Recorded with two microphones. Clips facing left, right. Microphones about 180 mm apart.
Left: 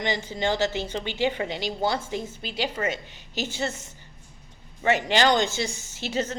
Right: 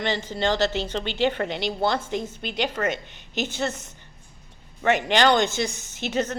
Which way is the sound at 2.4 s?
60° right (ahead or behind).